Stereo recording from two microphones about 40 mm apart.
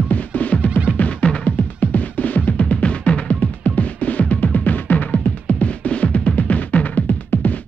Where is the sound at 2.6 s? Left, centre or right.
Left.